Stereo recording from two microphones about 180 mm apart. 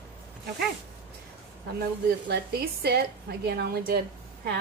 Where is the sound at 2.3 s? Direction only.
60° right (ahead or behind).